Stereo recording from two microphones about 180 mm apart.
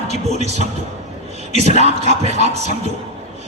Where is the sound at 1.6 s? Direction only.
40° left (ahead or behind).